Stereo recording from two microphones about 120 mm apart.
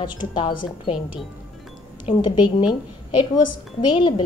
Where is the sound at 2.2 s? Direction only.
40° left (ahead or behind).